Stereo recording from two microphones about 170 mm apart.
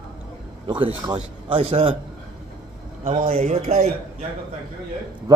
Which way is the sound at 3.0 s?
40° right (ahead or behind).